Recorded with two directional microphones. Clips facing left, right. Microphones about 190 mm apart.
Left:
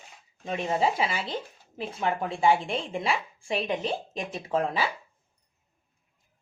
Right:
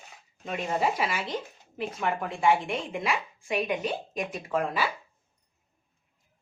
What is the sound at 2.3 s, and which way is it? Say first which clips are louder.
Speech: left 1 dB; 30° left (ahead or behind).